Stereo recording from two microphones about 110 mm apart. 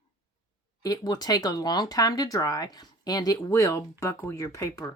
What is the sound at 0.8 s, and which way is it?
Speech, 35° left (ahead or behind).